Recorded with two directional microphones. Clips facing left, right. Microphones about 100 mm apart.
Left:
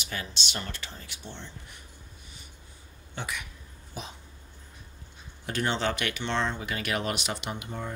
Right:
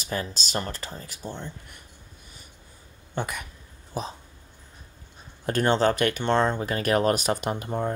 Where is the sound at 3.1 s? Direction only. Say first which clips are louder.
Right 6 dB; 45° right (ahead or behind).